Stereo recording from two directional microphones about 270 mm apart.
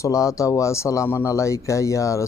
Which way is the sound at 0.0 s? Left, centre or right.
Centre.